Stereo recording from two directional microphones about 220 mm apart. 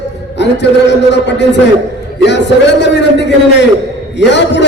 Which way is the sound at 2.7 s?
50° left (ahead or behind).